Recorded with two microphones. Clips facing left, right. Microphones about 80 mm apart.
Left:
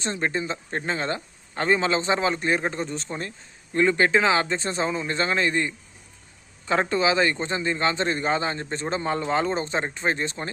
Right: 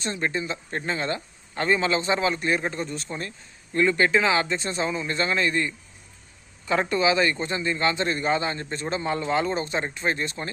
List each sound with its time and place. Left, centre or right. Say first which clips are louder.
0.0 s speech: left 1 dB; left